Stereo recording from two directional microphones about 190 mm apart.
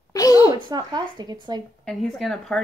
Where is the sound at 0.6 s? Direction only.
20° right (ahead or behind).